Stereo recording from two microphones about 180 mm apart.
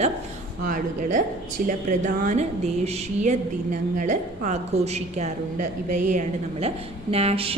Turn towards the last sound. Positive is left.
turn(degrees=-35)  # may be behind; listen again after turning